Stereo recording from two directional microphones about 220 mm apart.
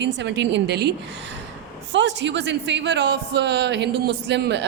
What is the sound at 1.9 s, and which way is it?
A woman's voice, 55° right (ahead or behind).